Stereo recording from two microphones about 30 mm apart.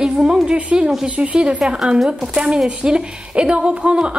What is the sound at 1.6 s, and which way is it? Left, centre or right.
Speech, centre.